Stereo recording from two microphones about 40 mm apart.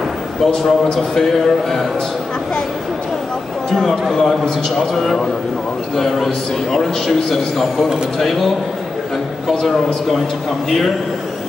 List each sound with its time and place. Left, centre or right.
0.5 s a man's voice: centre
3.7 s a man's voice: centre
9.5 s a man's voice: centre